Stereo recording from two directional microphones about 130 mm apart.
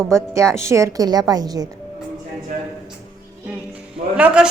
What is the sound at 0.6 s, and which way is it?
A woman's voice, 20° right (ahead or behind).